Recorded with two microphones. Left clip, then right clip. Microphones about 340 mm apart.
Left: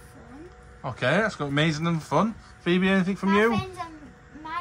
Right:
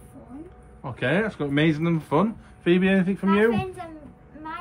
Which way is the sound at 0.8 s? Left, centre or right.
Centre.